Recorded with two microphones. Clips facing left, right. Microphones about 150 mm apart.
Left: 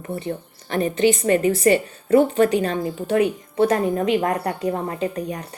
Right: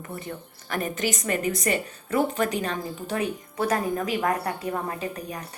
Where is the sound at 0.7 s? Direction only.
30° left (ahead or behind).